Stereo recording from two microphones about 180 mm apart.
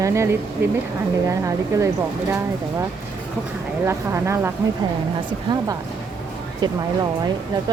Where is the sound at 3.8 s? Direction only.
15° right (ahead or behind).